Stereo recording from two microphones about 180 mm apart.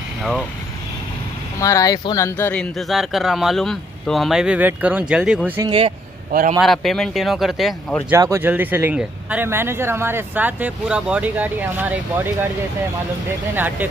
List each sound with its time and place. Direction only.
0.2 s speech: centre (ahead or behind)
1.6 s speech: 20° left (ahead or behind); by 5.5 s 5° right (ahead or behind)
5.6 s speech: 30° right (ahead or behind)
6.6 s speech: centre (ahead or behind)
8.1 s speech: 15° right (ahead or behind)
13.6 s speech: 10° right (ahead or behind)